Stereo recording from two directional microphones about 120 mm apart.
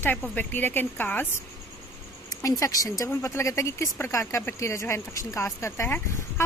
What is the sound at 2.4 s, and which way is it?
Speech, 25° left (ahead or behind).